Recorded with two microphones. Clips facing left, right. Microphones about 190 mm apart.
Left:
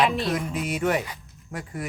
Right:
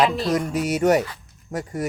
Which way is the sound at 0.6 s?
40° right (ahead or behind).